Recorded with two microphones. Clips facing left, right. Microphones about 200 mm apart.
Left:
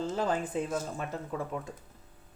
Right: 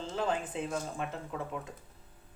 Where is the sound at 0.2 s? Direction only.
40° left (ahead or behind).